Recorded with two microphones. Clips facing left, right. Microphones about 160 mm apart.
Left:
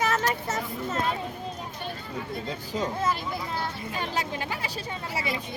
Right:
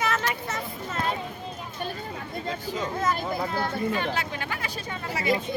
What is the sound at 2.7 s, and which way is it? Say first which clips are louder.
Speech: left 2 dB; 35° left (ahead or behind).